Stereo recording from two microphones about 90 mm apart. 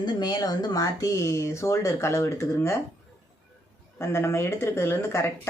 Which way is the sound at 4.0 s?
30° left (ahead or behind).